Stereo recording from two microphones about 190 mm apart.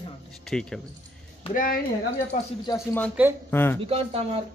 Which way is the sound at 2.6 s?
15° left (ahead or behind).